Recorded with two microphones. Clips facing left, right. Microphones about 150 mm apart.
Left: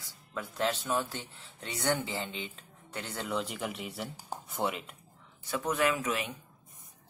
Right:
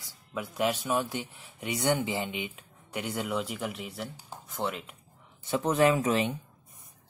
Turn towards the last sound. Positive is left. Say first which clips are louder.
# right 6 dB
turn(degrees=-30)  # may be behind; listen again after turning